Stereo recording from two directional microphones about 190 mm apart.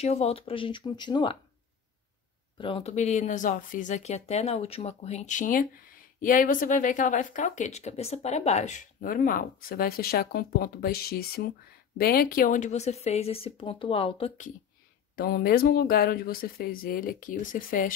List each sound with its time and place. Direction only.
0.0 s speech: 35° left (ahead or behind)
2.5 s speech: 25° left (ahead or behind)
15.1 s speech: 55° left (ahead or behind)